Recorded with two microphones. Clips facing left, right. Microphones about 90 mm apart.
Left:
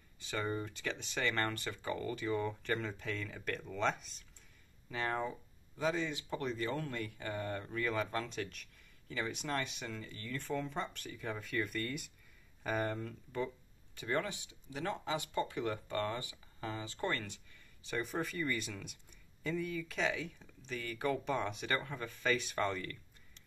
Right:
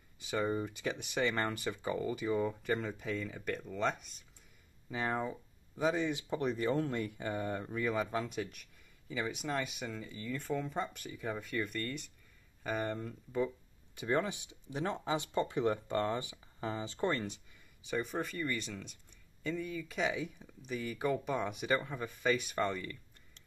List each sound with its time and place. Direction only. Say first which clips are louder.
0.2 s speech: right 4 dB; 15° right (ahead or behind)
4.8 s speech: right 1 dB; 15° right (ahead or behind)
17.8 s speech: right 2 dB; centre (ahead or behind)